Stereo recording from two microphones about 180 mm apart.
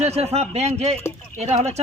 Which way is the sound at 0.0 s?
35° right (ahead or behind).